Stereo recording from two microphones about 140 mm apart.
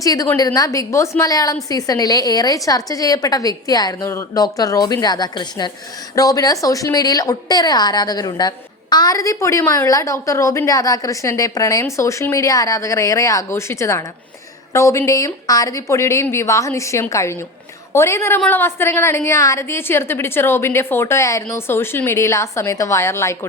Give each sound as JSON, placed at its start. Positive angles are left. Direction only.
{"t": 0.0, "sound": "a woman's voice", "side_deg": 25}